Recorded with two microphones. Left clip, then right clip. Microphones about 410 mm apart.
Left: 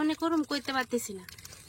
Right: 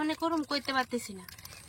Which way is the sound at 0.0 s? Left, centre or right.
Centre.